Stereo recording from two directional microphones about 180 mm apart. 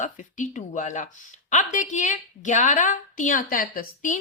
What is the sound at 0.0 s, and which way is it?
Speech, 45° left (ahead or behind).